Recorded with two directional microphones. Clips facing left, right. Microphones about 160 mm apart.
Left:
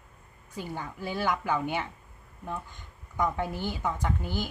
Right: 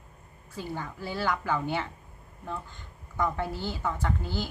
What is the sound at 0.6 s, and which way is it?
Speech, 15° left (ahead or behind).